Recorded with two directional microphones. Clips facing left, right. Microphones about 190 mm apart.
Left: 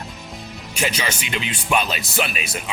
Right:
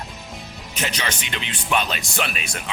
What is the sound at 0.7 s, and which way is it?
Speech, 10° left (ahead or behind).